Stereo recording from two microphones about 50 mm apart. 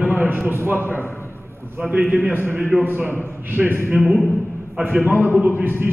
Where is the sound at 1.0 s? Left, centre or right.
Left.